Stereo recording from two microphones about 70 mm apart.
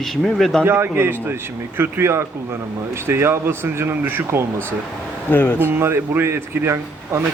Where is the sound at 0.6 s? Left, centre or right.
Right.